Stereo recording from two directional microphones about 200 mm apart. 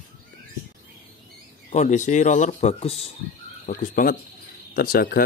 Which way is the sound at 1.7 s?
35° left (ahead or behind).